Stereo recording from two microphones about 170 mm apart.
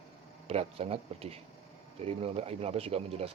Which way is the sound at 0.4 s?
35° right (ahead or behind).